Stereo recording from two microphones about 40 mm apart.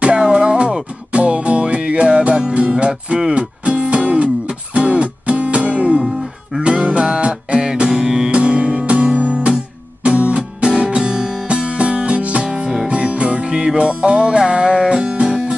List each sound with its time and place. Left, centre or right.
0.0 s music: centre
8.3 s music: right